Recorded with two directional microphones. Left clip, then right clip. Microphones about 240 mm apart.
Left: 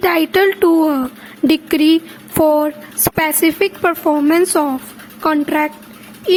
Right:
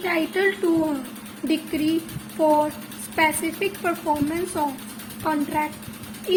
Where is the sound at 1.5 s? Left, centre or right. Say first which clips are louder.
Left 10 dB; left.